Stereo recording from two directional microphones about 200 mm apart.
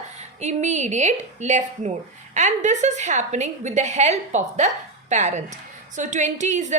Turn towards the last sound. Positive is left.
turn(degrees=-35)  # may be behind; listen again after turning